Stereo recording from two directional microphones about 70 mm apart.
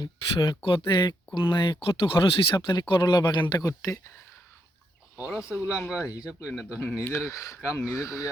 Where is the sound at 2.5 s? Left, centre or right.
Left.